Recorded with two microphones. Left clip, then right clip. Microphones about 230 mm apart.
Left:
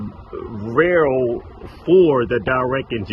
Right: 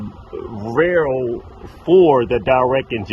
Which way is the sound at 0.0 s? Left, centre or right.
Centre.